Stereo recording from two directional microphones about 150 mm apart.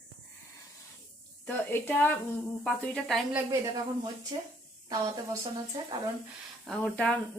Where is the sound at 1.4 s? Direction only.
10° left (ahead or behind).